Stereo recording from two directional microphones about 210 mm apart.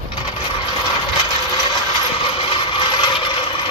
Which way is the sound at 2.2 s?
25° left (ahead or behind).